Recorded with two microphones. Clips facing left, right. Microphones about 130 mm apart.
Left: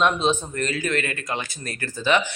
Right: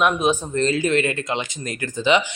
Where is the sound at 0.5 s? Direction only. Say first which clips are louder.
Right 6 dB; 25° right (ahead or behind).